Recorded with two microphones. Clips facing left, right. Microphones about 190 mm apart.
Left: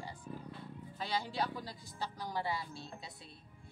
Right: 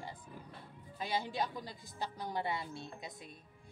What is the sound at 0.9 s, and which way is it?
A woman's voice, 20° right (ahead or behind).